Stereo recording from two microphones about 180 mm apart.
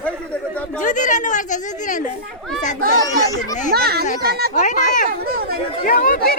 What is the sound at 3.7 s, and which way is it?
Speech, 60° right (ahead or behind).